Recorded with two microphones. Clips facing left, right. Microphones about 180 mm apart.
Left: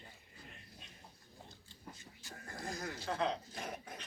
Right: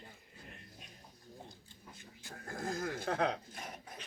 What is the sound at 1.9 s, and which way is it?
Speech, 55° right (ahead or behind).